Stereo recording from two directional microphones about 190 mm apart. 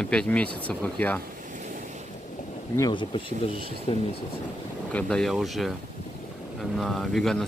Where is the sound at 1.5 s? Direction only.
40° right (ahead or behind).